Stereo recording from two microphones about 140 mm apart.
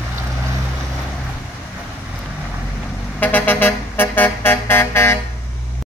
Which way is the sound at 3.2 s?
10° left (ahead or behind).